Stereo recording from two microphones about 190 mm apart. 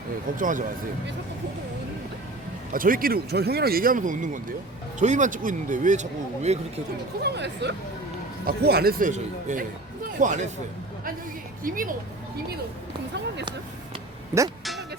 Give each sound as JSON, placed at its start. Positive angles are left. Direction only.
{"t": 0.3, "sound": "speech", "side_deg": -45}
{"t": 2.7, "sound": "speech", "side_deg": -45}
{"t": 7.2, "sound": "speech", "side_deg": -60}
{"t": 11.6, "sound": "speech", "side_deg": -45}
{"t": 14.6, "sound": "music", "side_deg": 0}